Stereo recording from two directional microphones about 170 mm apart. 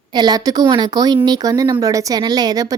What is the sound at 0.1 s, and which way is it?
A woman's voice, 25° right (ahead or behind).